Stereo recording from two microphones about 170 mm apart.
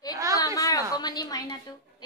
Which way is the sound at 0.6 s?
20° left (ahead or behind).